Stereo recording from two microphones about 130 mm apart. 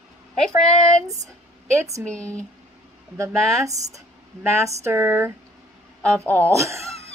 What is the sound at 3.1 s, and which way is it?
Speech, 25° right (ahead or behind).